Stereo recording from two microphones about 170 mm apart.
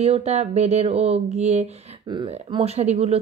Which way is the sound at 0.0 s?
40° right (ahead or behind).